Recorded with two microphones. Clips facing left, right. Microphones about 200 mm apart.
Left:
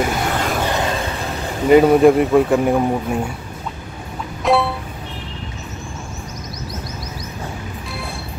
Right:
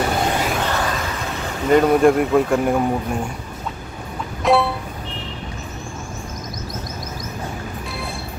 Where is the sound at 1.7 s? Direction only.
5° left (ahead or behind).